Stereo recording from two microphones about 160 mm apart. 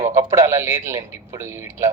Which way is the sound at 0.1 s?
20° right (ahead or behind).